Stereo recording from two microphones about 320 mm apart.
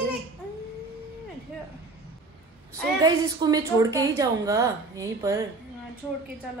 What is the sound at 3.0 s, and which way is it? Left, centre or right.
Speech, centre.